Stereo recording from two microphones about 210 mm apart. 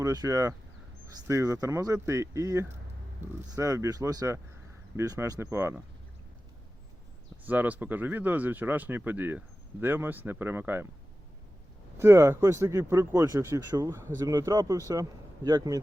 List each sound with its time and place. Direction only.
0.0 s speech: 15° right (ahead or behind)
7.4 s speech: 5° right (ahead or behind)
11.9 s a man's voice: 15° right (ahead or behind)